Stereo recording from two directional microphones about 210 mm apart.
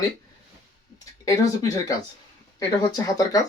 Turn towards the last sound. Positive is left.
turn(degrees=15)  # may be behind; listen again after turning